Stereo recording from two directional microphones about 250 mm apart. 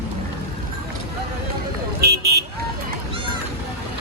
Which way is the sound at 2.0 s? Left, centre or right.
Right.